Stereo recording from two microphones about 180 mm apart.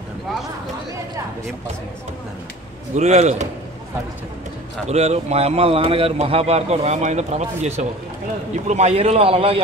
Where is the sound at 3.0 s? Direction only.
40° right (ahead or behind).